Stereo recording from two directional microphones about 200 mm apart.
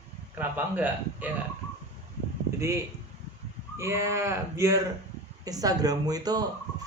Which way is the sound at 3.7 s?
15° right (ahead or behind).